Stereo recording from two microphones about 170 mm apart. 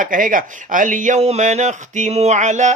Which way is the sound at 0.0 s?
50° right (ahead or behind).